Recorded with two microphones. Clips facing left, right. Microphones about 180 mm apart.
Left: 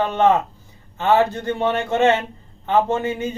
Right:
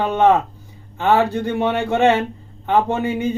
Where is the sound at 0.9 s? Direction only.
15° right (ahead or behind).